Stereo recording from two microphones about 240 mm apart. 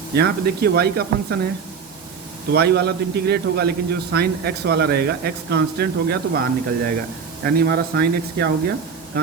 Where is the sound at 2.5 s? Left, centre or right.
Right.